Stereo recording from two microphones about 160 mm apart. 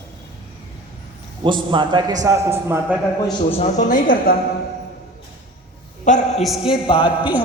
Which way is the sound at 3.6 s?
50° left (ahead or behind).